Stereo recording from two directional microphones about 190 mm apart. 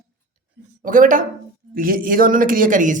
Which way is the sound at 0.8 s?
45° right (ahead or behind).